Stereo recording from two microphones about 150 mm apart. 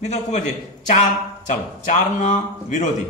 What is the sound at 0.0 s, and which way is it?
Speech, 50° left (ahead or behind).